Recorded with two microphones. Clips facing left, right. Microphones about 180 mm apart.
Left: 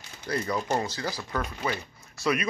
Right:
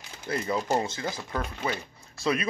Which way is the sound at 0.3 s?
25° right (ahead or behind).